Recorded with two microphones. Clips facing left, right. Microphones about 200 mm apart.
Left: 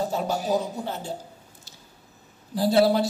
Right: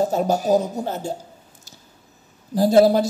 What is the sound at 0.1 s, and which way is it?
A man's voice, 45° right (ahead or behind).